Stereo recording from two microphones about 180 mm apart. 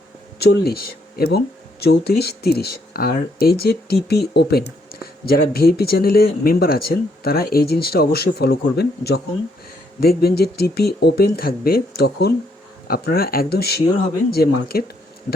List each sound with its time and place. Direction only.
0.3 s speech: 60° left (ahead or behind)